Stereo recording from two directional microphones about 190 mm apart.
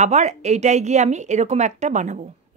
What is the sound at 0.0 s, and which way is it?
A woman's voice, 40° right (ahead or behind).